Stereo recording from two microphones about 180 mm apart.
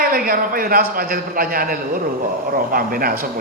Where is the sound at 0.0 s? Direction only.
55° right (ahead or behind).